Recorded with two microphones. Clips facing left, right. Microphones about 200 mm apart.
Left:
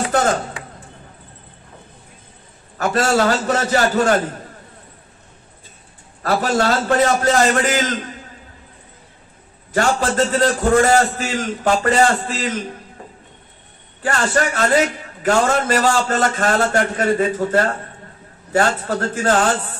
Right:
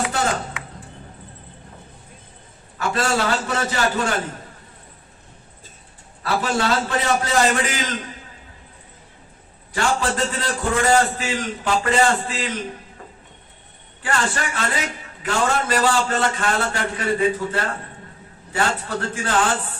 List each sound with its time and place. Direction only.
0.0 s chopping: 40° left (ahead or behind)
2.7 s a man's voice: 45° left (ahead or behind)
6.2 s a man's voice: 45° left (ahead or behind)
9.7 s a man's voice: 45° left (ahead or behind)
14.0 s a man's voice: 45° left (ahead or behind)